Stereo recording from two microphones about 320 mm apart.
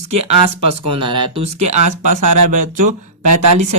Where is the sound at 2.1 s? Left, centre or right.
Right.